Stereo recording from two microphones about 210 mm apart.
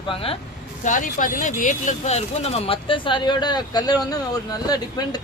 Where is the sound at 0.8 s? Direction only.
40° left (ahead or behind).